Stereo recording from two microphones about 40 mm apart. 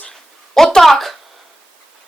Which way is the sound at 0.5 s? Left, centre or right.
Centre.